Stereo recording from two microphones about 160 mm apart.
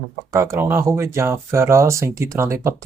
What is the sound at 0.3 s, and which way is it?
Speech, 15° right (ahead or behind).